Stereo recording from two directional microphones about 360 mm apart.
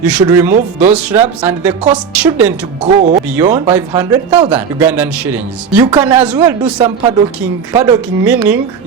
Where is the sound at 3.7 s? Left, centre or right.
Centre.